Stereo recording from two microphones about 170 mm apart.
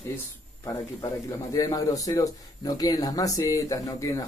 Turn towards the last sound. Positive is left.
turn(degrees=20)  # may be behind; listen again after turning